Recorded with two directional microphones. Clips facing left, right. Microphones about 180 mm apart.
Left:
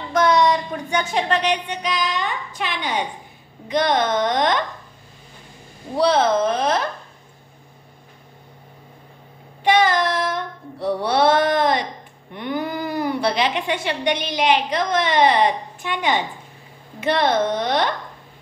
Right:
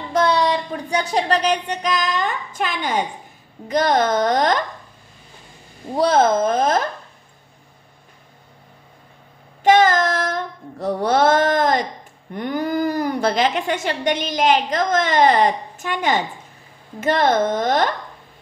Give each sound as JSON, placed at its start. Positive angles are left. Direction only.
{"t": 0.1, "sound": "a child's voice", "side_deg": -30}
{"t": 5.9, "sound": "a woman's voice", "side_deg": -45}
{"t": 9.6, "sound": "female singing", "side_deg": -45}
{"t": 12.4, "sound": "a woman's voice", "side_deg": -45}